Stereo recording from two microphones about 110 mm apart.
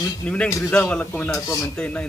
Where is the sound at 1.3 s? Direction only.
30° left (ahead or behind).